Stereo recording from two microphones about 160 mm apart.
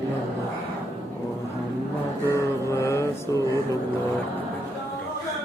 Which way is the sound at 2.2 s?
20° left (ahead or behind).